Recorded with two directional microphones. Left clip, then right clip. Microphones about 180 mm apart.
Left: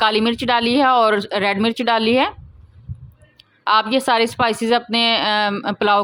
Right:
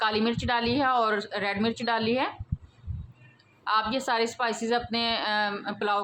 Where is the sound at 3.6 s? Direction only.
50° left (ahead or behind).